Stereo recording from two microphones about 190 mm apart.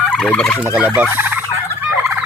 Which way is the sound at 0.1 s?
5° left (ahead or behind).